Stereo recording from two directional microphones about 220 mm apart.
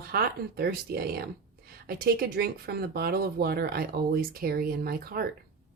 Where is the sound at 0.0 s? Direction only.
45° right (ahead or behind).